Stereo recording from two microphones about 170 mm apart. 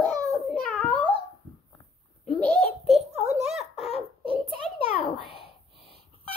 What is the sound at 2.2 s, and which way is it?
Giggle, 5° left (ahead or behind).